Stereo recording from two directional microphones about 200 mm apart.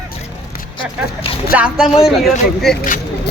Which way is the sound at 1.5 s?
5° right (ahead or behind).